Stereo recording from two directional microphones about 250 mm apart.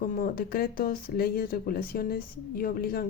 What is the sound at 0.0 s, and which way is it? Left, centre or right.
Speech, left.